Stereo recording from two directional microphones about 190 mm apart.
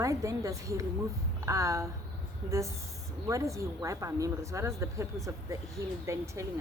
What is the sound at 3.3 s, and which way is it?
Speech, 15° right (ahead or behind).